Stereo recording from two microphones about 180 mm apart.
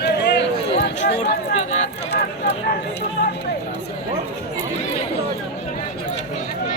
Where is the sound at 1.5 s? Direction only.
40° left (ahead or behind).